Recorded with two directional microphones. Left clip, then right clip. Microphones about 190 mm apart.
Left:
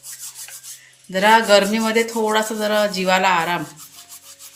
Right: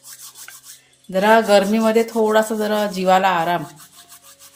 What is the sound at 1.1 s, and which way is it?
Speech, 55° right (ahead or behind).